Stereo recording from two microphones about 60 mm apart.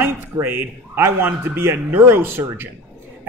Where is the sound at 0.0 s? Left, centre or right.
Right.